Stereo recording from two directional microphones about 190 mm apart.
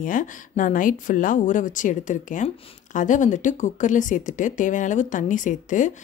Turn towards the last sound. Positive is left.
turn(degrees=40)  # may be behind; listen again after turning